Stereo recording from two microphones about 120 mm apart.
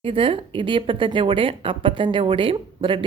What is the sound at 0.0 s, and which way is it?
Speech, 45° right (ahead or behind).